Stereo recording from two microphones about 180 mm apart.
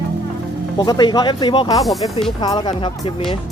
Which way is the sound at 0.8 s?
25° left (ahead or behind).